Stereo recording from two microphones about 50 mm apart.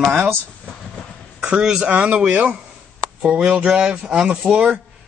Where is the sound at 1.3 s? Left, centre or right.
Centre.